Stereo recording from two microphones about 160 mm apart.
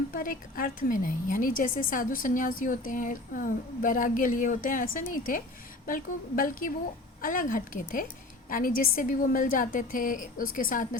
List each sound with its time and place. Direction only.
0.1 s a woman's voice: 60° left (ahead or behind)